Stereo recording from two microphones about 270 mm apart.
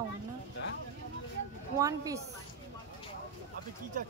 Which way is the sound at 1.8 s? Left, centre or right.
Centre.